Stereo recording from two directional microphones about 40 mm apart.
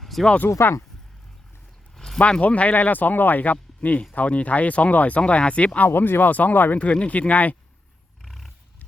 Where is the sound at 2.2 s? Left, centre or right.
Left.